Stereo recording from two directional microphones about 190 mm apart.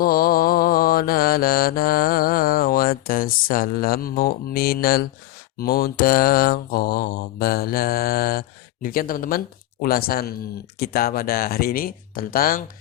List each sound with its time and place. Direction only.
0.0 s mantra: 50° left (ahead or behind)